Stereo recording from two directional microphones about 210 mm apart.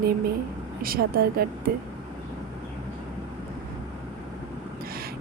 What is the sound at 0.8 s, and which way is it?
Speech, 45° right (ahead or behind).